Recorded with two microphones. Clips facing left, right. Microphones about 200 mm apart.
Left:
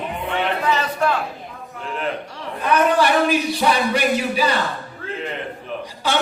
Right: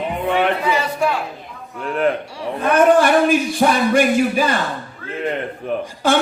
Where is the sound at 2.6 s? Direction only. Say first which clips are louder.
Right 4 dB; 50° right (ahead or behind).